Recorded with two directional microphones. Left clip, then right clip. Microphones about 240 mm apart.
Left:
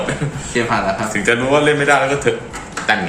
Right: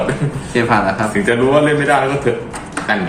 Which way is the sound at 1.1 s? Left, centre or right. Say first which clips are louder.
Right 1 dB; left.